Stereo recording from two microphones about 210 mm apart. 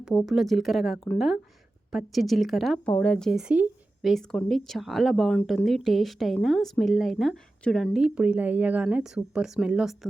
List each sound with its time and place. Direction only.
0.0 s speech: centre (ahead or behind)